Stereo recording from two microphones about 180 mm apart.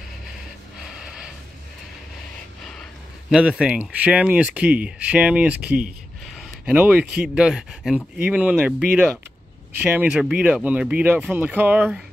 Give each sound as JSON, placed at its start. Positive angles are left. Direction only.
{"t": 3.3, "sound": "speech", "side_deg": -5}